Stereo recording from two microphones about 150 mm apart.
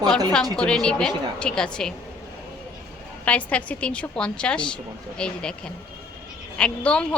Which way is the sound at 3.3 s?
10° left (ahead or behind).